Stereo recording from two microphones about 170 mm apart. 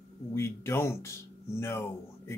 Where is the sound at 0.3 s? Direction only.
15° left (ahead or behind).